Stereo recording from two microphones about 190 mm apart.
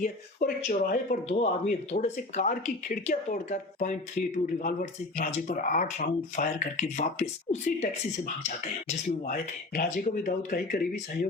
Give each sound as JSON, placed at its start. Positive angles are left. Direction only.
{"t": 0.0, "sound": "speech", "side_deg": 50}